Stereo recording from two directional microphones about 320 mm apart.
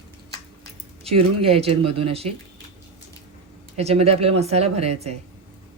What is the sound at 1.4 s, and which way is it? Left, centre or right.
Speech, centre.